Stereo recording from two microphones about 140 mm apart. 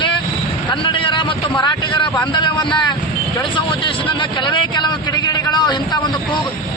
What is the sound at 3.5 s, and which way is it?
Speech, 35° left (ahead or behind).